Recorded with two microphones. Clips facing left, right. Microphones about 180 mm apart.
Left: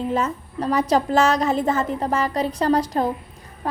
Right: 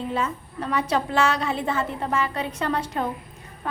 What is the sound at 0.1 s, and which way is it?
Speech, 40° left (ahead or behind).